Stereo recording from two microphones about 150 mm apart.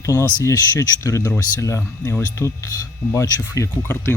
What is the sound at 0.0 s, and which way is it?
Speech, 20° left (ahead or behind).